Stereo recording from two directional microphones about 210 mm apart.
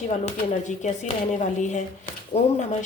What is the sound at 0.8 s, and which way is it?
Speech, 35° left (ahead or behind).